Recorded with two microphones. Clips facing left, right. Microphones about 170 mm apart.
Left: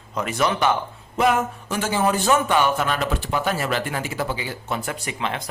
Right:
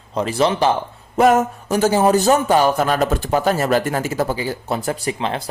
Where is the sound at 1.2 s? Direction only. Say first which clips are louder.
Right 6 dB; 45° right (ahead or behind).